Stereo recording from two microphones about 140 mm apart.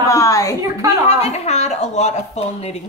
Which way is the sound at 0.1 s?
25° left (ahead or behind).